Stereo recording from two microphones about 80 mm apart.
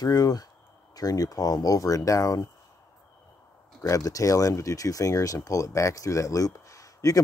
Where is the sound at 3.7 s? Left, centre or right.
Left.